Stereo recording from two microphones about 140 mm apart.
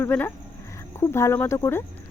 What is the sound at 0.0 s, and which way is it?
Speech, 15° left (ahead or behind).